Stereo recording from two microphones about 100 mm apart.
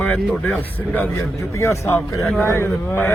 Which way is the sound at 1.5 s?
30° left (ahead or behind).